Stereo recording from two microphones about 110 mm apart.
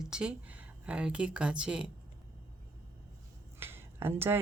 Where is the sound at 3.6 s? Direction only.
20° right (ahead or behind).